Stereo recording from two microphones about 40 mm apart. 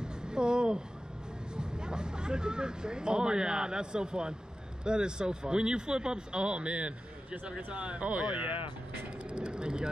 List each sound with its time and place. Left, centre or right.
0.0 s a sound: right
1.6 s speech: right
9.3 s vehicle: right